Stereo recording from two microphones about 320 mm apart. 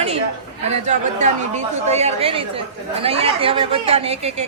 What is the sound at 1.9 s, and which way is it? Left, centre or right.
A woman's voice, centre.